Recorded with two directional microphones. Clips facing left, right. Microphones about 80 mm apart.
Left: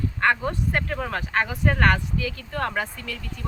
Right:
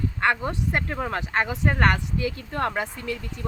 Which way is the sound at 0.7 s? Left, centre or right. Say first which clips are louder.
Even; right.